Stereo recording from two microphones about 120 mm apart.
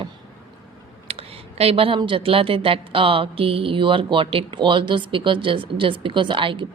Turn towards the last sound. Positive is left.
turn(degrees=-45)  # may be behind; listen again after turning